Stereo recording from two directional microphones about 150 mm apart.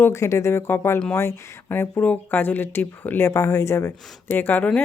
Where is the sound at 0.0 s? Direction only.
20° left (ahead or behind).